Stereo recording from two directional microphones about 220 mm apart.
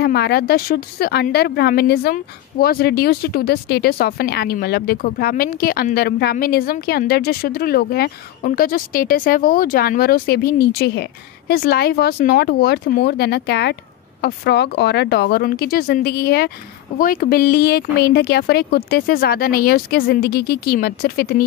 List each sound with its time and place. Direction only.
0.0 s speech: 45° left (ahead or behind)